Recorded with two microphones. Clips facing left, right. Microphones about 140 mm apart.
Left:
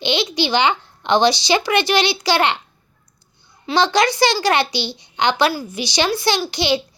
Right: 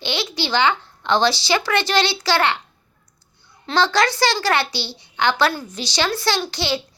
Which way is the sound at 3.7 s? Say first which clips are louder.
Left 2 dB; 15° left (ahead or behind).